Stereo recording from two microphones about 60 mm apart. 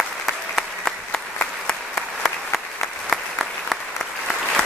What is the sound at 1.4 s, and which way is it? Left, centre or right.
Applause, centre.